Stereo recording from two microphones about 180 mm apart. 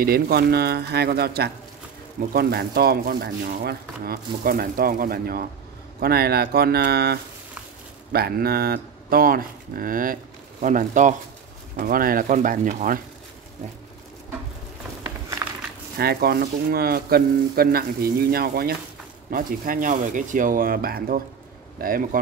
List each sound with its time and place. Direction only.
0.0 s speech: 60° right (ahead or behind)
16.0 s speech: 60° right (ahead or behind)